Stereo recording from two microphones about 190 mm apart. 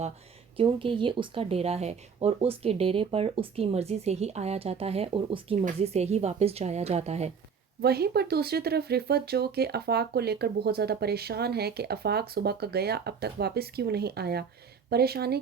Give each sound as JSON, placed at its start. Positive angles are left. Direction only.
{"t": 0.5, "sound": "speech", "side_deg": -30}
{"t": 7.8, "sound": "speech", "side_deg": -55}